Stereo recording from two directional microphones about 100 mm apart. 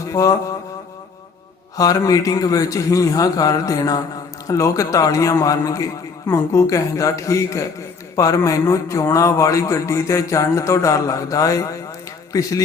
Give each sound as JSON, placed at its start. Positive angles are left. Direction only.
{"t": 0.1, "sound": "mantra", "side_deg": 35}
{"t": 1.7, "sound": "a man's voice", "side_deg": 35}